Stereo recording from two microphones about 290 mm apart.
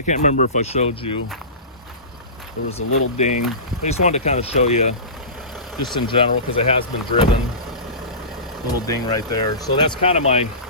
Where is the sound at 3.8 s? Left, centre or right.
Left.